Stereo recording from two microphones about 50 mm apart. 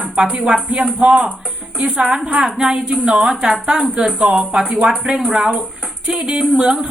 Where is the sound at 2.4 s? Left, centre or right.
Centre.